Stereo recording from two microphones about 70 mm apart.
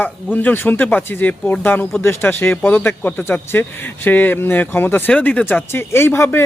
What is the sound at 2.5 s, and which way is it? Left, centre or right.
A man's voice, left.